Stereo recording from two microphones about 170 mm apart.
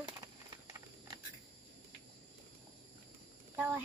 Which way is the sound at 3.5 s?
10° right (ahead or behind).